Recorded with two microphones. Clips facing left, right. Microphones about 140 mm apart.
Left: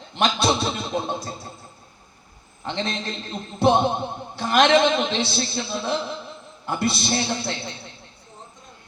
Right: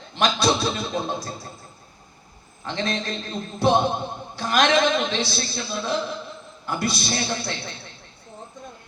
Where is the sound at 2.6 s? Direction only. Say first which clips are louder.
Right 1 dB; 25° left (ahead or behind).